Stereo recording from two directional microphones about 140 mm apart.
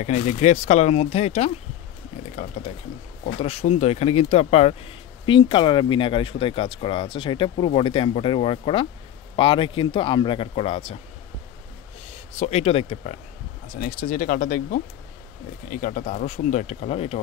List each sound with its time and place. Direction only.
0.0 s speech: 55° left (ahead or behind)
12.4 s speech: 50° left (ahead or behind)
13.7 s speech: 80° left; by 17.2 s 45° left (ahead or behind)